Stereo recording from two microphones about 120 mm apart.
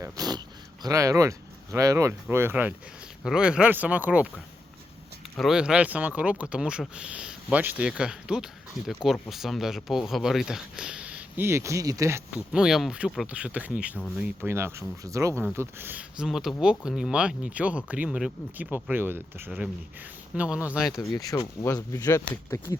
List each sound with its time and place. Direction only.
0.0 s speech: 35° right (ahead or behind); by 4.3 s 10° right (ahead or behind)
5.4 s speech: 5° right (ahead or behind)
11.4 s speech: 25° right (ahead or behind)
12.3 s speech: 5° right (ahead or behind); by 15.4 s 25° right (ahead or behind)
15.8 s speech: 15° right (ahead or behind)
19.5 s speech: 5° right (ahead or behind)
20.9 s speech: 30° left (ahead or behind)